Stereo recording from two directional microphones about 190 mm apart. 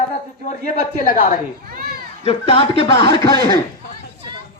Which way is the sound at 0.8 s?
40° left (ahead or behind).